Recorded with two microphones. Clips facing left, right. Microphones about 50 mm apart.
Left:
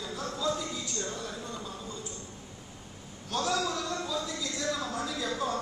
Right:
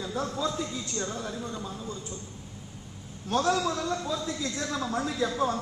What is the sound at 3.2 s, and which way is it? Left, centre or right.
A man's voice, right.